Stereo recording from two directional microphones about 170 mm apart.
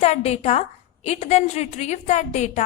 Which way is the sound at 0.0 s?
40° left (ahead or behind).